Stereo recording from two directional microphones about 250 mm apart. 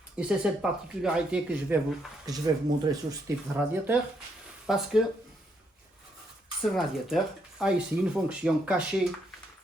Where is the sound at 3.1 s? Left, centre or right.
Centre.